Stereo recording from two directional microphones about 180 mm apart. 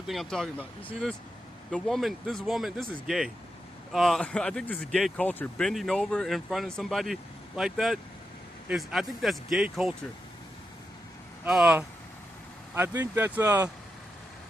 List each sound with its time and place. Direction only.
0.1 s speech: centre (ahead or behind)
11.4 s speech: 5° right (ahead or behind)